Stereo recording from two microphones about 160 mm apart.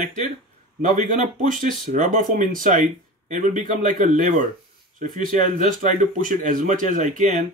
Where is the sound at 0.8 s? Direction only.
50° right (ahead or behind).